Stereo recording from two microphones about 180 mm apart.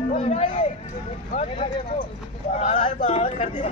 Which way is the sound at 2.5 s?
35° left (ahead or behind).